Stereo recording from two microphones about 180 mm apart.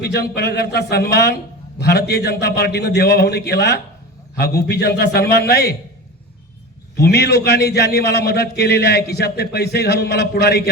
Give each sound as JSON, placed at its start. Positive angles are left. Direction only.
{"t": 0.0, "sound": "a man's voice", "side_deg": 65}
{"t": 6.9, "sound": "a man's voice", "side_deg": 65}